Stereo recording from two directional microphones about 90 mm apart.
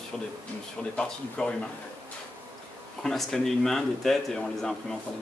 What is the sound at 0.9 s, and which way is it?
Speech, 10° left (ahead or behind).